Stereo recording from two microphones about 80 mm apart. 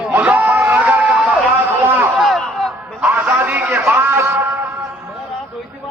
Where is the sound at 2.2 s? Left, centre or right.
Centre.